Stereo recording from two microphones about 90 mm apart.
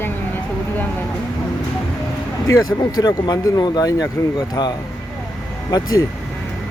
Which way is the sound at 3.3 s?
50° left (ahead or behind).